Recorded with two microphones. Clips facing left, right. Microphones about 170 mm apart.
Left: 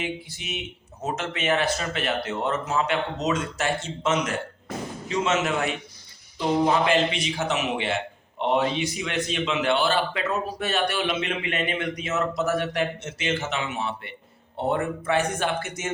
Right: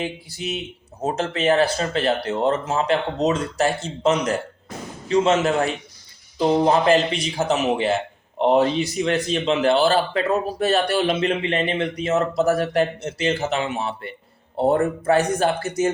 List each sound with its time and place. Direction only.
0.0 s a man's voice: 35° right (ahead or behind)